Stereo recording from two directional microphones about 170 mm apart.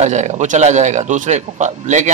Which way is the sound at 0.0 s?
40° right (ahead or behind).